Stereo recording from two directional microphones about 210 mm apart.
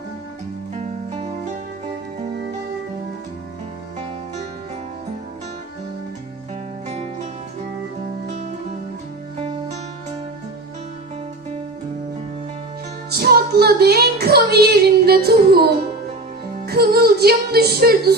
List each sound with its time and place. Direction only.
0.8 s music: 30° right (ahead or behind)
6.8 s music: 30° right (ahead or behind)
8.3 s music: 35° right (ahead or behind)
13.1 s music: 50° right (ahead or behind)
16.6 s music: 50° right (ahead or behind)